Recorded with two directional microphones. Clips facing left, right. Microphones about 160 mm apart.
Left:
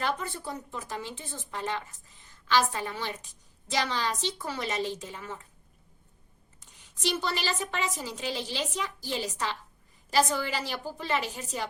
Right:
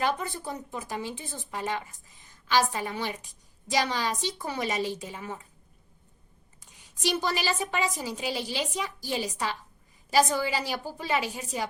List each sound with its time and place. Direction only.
0.0 s a woman's voice: 15° right (ahead or behind)
7.0 s a woman's voice: 15° right (ahead or behind)